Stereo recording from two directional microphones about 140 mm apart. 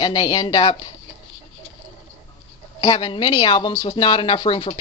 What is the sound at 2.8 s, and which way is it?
Speech, 35° left (ahead or behind).